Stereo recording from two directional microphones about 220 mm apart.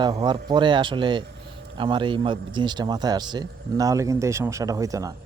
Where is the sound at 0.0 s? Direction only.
20° right (ahead or behind).